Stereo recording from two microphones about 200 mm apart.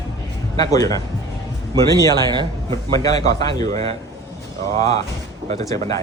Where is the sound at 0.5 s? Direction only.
20° left (ahead or behind).